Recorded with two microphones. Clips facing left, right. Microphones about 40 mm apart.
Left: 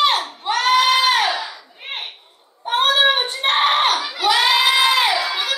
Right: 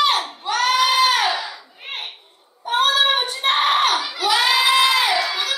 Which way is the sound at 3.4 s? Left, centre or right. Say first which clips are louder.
Left 1 dB; left.